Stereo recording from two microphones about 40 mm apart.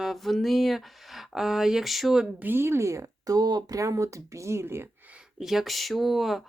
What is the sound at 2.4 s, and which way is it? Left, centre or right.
Speech, right.